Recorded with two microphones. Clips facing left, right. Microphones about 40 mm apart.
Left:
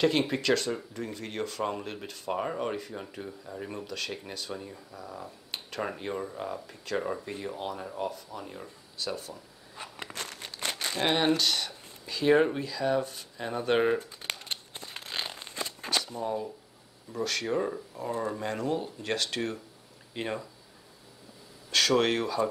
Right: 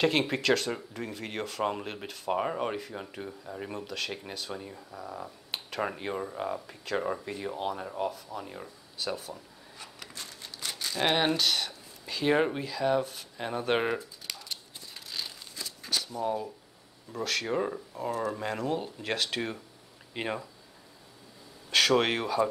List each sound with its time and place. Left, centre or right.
0.0 s speech: centre
9.8 s a sound: left
10.1 s crumpling: left
11.1 s speech: centre
14.2 s a sound: left
17.1 s speech: centre
21.6 s speech: centre